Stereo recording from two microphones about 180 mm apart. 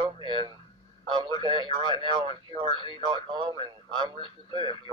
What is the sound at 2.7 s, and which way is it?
Speech, 25° left (ahead or behind).